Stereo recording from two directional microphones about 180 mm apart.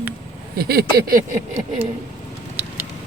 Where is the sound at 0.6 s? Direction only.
60° right (ahead or behind).